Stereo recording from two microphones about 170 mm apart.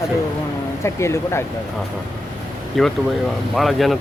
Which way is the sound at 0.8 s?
15° left (ahead or behind).